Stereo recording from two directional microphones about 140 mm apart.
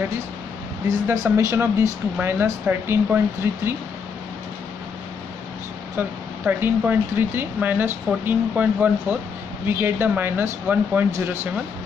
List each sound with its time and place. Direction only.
0.8 s speech: 25° right (ahead or behind)
5.9 s speech: 15° right (ahead or behind)